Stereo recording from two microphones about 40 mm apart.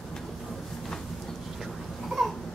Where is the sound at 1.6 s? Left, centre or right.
Centre.